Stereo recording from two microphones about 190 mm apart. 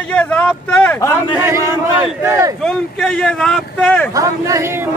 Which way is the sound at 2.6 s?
5° left (ahead or behind).